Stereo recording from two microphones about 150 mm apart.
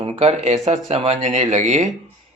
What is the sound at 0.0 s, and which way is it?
Speech, 40° right (ahead or behind).